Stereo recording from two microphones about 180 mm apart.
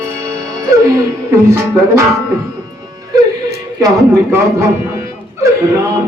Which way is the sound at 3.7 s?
15° right (ahead or behind).